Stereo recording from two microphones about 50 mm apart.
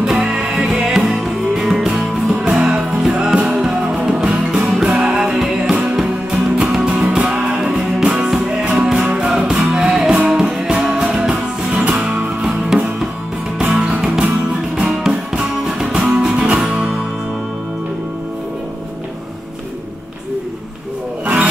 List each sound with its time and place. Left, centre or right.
0.0 s music: centre
9.0 s music: right
9.3 s music: centre
12.4 s music: centre
13.7 s music: right